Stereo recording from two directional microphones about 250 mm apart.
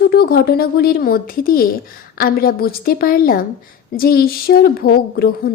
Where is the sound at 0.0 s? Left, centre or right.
Left.